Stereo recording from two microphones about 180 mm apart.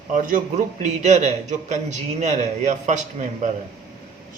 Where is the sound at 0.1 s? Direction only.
45° right (ahead or behind).